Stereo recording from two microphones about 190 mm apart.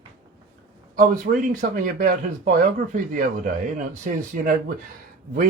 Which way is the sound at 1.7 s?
45° right (ahead or behind).